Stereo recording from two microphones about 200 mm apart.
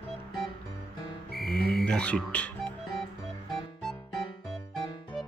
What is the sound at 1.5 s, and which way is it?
Music, 50° left (ahead or behind).